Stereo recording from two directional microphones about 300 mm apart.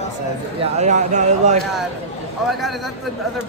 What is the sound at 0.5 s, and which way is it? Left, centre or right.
A man's voice, right.